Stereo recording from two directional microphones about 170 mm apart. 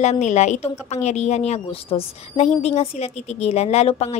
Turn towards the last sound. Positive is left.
turn(degrees=35)  # may be behind; listen again after turning